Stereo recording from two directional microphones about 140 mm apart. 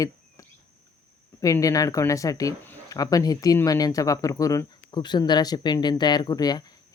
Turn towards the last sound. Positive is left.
turn(degrees=30)  # may be behind; listen again after turning